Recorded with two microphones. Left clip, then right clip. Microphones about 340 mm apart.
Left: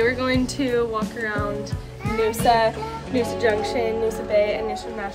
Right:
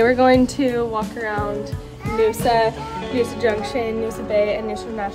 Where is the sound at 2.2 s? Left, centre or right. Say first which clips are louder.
Right 1 dB; centre.